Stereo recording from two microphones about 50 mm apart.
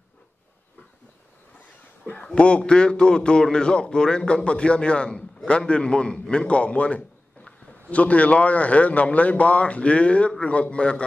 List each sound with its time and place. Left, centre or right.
2.2 s a man's voice: left